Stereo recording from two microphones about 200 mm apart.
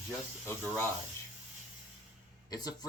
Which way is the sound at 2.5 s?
20° left (ahead or behind).